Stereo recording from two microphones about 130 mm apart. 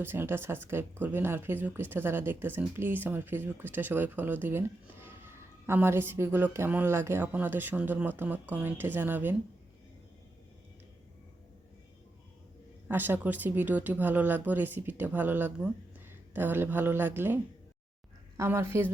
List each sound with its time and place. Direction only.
0.0 s speech: 15° right (ahead or behind)
12.9 s a woman's voice: 15° right (ahead or behind)